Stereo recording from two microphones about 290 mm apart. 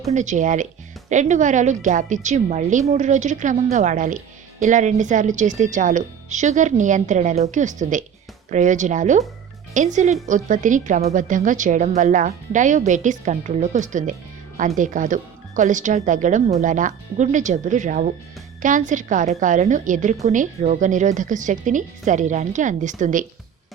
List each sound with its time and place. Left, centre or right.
0.1 s a woman's voice: right